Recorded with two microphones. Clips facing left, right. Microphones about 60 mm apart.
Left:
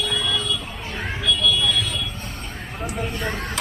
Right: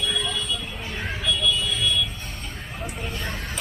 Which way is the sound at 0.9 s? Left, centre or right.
Centre.